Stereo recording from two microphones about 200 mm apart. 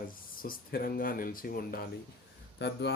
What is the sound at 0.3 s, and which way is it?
Speech, 45° left (ahead or behind).